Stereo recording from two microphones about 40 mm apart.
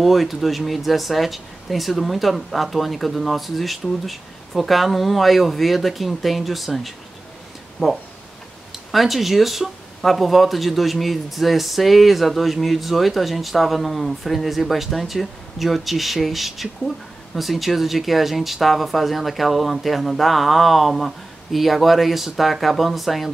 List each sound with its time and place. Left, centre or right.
0.0 s speech: centre
7.8 s speech: left
8.9 s speech: centre